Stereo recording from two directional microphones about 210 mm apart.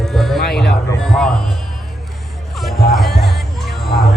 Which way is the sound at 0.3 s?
50° left (ahead or behind).